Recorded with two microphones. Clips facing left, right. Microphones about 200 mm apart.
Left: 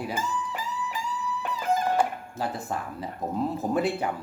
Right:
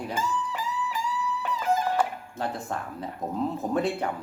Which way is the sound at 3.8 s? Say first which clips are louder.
Even; 5° left (ahead or behind).